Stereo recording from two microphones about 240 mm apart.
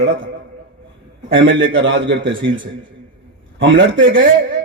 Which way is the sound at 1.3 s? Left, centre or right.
Right.